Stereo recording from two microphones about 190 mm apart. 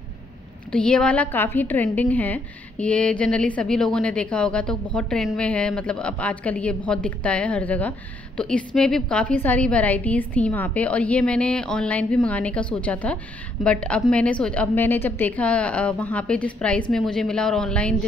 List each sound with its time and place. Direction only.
0.7 s a woman's voice: 5° left (ahead or behind)